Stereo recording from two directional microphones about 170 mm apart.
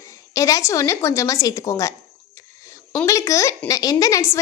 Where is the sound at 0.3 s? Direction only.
20° left (ahead or behind).